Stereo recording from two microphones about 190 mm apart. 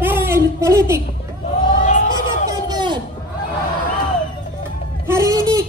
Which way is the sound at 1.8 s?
40° left (ahead or behind).